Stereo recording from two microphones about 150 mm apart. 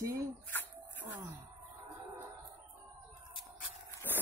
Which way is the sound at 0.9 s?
10° right (ahead or behind).